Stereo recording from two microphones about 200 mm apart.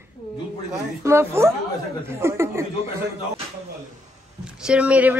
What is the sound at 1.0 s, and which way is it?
Speech, 10° right (ahead or behind).